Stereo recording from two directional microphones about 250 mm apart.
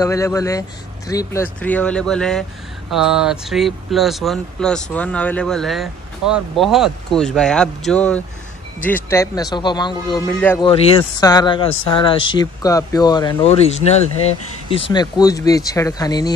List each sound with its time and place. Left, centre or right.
0.0 s speech: centre
10.6 s speech: left